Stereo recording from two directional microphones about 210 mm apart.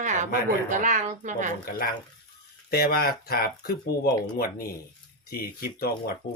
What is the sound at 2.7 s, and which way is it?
Speech, 45° left (ahead or behind).